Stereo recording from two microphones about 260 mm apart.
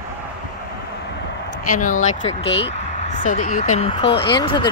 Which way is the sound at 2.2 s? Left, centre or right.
Left.